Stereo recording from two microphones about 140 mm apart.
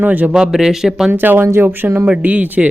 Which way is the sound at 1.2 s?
15° right (ahead or behind).